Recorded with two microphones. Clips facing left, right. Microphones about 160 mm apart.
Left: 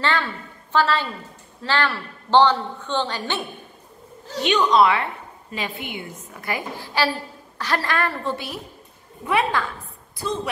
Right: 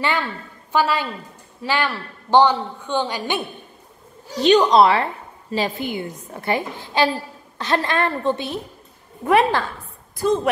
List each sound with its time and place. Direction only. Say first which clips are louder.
0.0 s a woman's voice: right 1 dB; 10° right (ahead or behind)
4.4 s a woman's voice: right 4 dB; 35° right (ahead or behind); by 8.5 s 20° right (ahead or behind)
9.2 s a woman's voice: right 5 dB; 40° right (ahead or behind)
10.1 s a woman's voice: right 8 dB; 50° right (ahead or behind)